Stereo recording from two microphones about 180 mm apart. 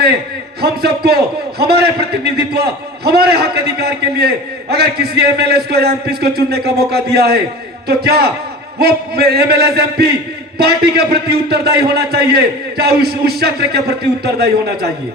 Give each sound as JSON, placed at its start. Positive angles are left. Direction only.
{"t": 0.6, "sound": "a man's voice", "side_deg": -60}